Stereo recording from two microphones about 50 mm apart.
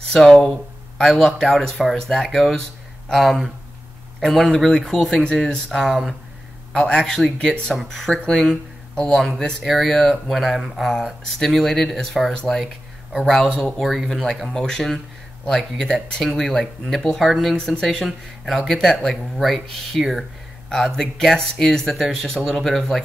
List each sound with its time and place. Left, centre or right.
0.1 s speech: centre
6.7 s speech: centre
7.7 s speech: centre
13.8 s speech: centre
16.2 s speech: centre
20.7 s speech: centre